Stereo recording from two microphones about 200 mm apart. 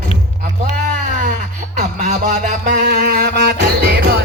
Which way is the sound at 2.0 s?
40° right (ahead or behind).